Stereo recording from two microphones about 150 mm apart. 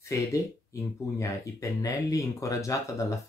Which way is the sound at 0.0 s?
20° left (ahead or behind).